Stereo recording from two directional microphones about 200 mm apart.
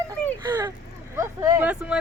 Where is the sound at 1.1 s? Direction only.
15° right (ahead or behind).